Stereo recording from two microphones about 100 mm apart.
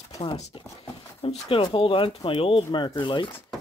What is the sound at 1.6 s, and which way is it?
Speech, 60° left (ahead or behind).